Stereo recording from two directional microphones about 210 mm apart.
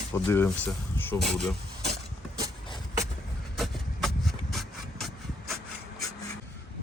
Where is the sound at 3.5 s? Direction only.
Centre (ahead or behind).